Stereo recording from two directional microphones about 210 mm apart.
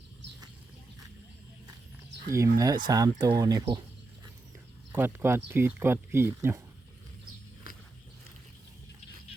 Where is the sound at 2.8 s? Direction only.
15° right (ahead or behind).